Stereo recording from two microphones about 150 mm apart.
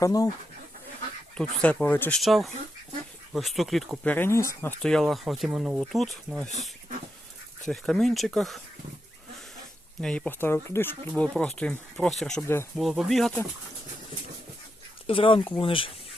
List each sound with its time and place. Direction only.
0.0 s speech: 25° left (ahead or behind)
1.4 s speech: 10° left (ahead or behind)
4.0 s speech: 10° left (ahead or behind)
4.8 s speech: 5° left (ahead or behind)
7.6 s speech: 5° left (ahead or behind)
10.0 s speech: 5° left (ahead or behind)
11.1 s speech: 5° left (ahead or behind)
15.0 s speech: 35° left (ahead or behind)